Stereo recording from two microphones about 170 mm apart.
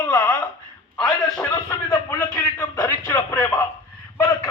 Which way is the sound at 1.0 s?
5° left (ahead or behind).